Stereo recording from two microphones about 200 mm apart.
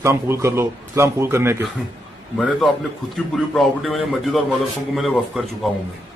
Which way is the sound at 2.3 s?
Centre (ahead or behind).